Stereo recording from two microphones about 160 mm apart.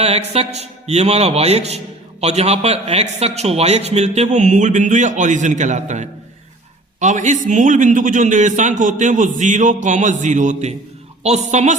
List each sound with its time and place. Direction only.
0.0 s a man's voice: 40° right (ahead or behind)